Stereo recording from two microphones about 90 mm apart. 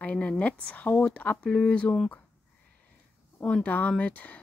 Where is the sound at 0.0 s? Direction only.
15° left (ahead or behind).